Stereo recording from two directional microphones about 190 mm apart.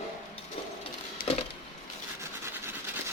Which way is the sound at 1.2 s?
50° left (ahead or behind).